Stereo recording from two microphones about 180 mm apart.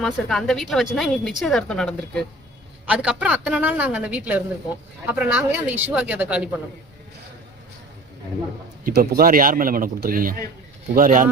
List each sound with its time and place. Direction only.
0.0 s a woman's voice: centre (ahead or behind)
8.8 s speech: 55° right (ahead or behind)